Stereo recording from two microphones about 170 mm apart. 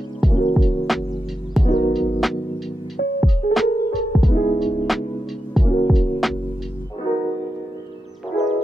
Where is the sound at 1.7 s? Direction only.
30° left (ahead or behind).